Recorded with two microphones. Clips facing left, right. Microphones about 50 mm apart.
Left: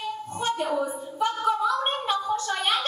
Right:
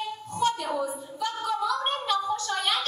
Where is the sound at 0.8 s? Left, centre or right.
Left.